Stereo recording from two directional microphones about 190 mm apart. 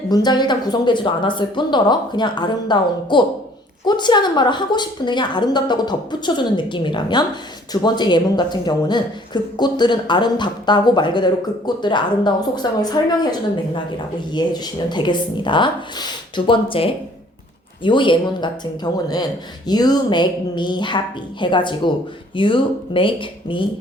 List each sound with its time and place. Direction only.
0.1 s speech: 20° left (ahead or behind)
14.3 s speech: 20° left (ahead or behind)